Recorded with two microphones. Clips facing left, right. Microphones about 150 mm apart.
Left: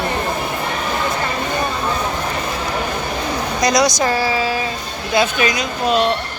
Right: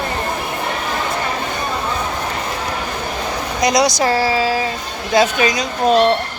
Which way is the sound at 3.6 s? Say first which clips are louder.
Right 1 dB; 25° right (ahead or behind).